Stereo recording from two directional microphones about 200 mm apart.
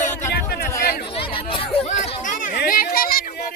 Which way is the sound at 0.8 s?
55° left (ahead or behind).